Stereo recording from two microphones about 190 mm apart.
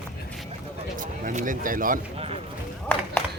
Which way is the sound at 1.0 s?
45° right (ahead or behind).